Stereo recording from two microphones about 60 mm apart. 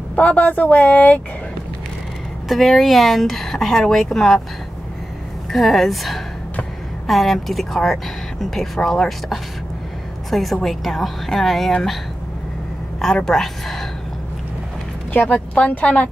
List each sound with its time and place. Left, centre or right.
0.1 s speech: left
2.4 s speech: centre
5.5 s speech: centre
13.0 s speech: centre
15.1 s speech: left